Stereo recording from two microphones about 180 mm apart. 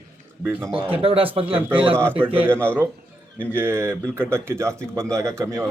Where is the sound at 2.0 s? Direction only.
10° right (ahead or behind).